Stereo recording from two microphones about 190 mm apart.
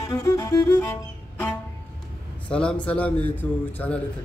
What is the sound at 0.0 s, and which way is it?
Speech, 15° left (ahead or behind).